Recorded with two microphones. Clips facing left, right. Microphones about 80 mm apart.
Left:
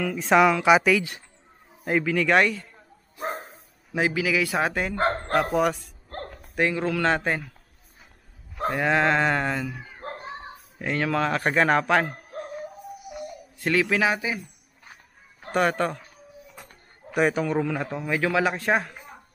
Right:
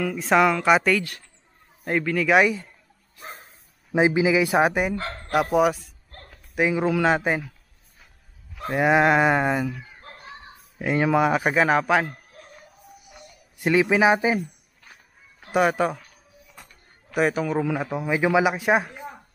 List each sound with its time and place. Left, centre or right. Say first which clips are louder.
0.0 s a man's voice: even; centre
3.2 s bow-wow: left 10 dB; left
3.9 s speech: right 5 dB; right
4.9 s dog: left 7 dB; left
5.3 s a man's voice: right 6 dB; centre
6.0 s a sound: left 13 dB; left
6.5 s speech: right 3 dB; centre
8.7 s speech: right 4 dB; centre
9.9 s children playing: left 7 dB; left
10.8 s speech: right 5 dB; centre
12.1 s dog: left 8 dB; left
13.6 s speech: right 4 dB; centre
15.5 s a man's voice: right 2 dB; centre
17.1 s a man's voice: even; centre